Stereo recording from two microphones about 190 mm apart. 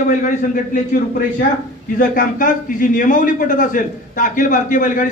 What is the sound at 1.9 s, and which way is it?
A man's voice, 45° left (ahead or behind).